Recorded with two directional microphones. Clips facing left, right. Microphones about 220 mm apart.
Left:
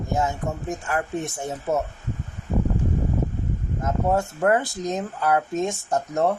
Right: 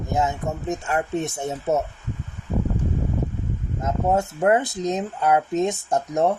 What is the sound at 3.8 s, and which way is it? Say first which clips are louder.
Speech: right 1 dB; 20° right (ahead or behind).